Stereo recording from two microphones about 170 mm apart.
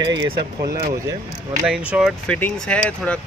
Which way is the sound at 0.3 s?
30° right (ahead or behind).